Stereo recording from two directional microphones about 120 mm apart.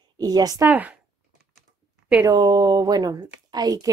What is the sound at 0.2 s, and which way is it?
Speech, 30° right (ahead or behind).